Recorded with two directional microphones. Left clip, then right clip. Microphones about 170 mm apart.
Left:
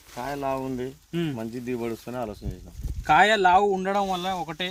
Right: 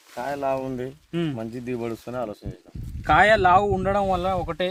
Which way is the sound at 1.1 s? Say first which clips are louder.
Right 2 dB; 20° right (ahead or behind).